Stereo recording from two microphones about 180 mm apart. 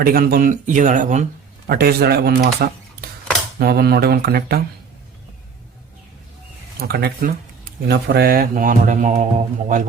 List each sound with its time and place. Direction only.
0.0 s mantra: 55° right (ahead or behind)
1.6 s speech: 60° right (ahead or behind)
6.7 s speech: 60° right (ahead or behind)
7.9 s mantra: 60° right (ahead or behind); by 9.8 s 45° right (ahead or behind)